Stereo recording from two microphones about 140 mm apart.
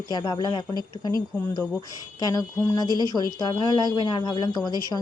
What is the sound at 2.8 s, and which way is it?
Speech, 30° right (ahead or behind).